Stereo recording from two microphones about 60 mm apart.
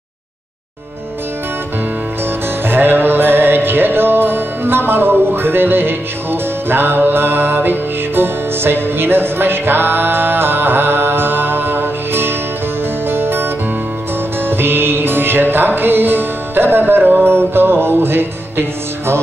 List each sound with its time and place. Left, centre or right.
2.7 s music: right